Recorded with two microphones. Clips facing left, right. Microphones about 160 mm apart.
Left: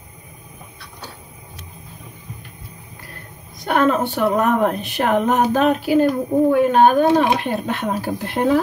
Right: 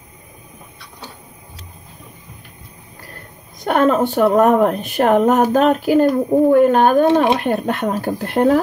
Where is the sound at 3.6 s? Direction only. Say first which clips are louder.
Right 3 dB; 45° right (ahead or behind).